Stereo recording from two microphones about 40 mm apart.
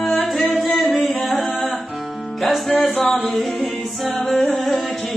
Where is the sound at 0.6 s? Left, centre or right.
Centre.